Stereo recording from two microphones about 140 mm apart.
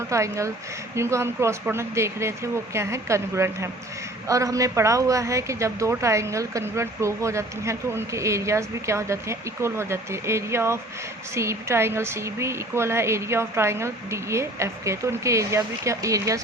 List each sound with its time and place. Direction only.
0.1 s a woman's voice: 20° right (ahead or behind)